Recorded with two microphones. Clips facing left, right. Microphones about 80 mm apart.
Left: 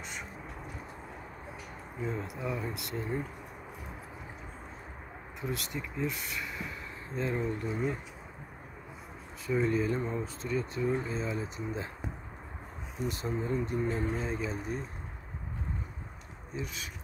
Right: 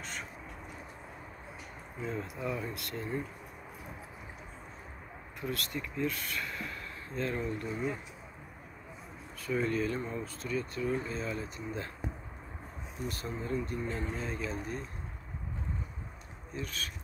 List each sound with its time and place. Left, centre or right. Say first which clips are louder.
2.0 s speech: left 1 dB; centre
5.5 s speech: even; centre
9.5 s speech: left 3 dB; centre
13.0 s speech: left 5 dB; left
16.5 s speech: even; centre